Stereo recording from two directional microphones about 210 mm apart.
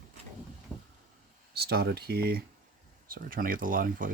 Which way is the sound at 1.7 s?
50° right (ahead or behind).